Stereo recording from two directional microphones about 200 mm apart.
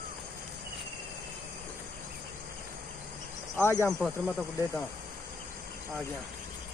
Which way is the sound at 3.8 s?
5° right (ahead or behind).